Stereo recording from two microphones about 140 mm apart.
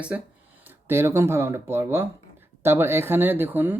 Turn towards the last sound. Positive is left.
turn(degrees=-15)  # may be behind; listen again after turning